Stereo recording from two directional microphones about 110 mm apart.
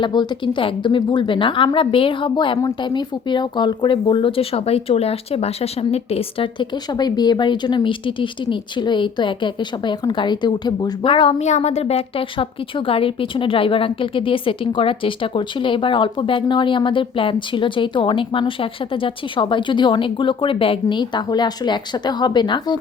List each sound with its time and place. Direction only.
0.0 s speech: 40° left (ahead or behind)
11.3 s speech: 90° left; by 22.8 s 45° left (ahead or behind)